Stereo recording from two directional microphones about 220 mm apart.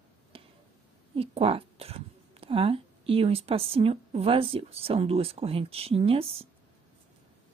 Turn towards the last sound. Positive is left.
turn(degrees=-25)  # may be behind; listen again after turning